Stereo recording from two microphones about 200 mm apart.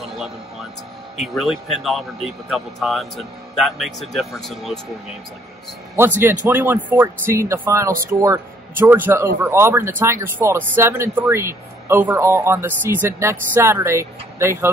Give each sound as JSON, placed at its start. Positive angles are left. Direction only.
{"t": 0.0, "sound": "music", "side_deg": 0}
{"t": 1.2, "sound": "speech", "side_deg": 0}
{"t": 5.9, "sound": "speech", "side_deg": -10}